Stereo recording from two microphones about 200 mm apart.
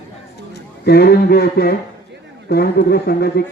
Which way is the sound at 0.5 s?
55° left (ahead or behind).